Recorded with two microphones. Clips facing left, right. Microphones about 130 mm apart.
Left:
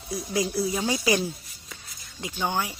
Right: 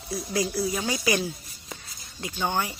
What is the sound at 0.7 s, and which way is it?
Speech, 20° left (ahead or behind).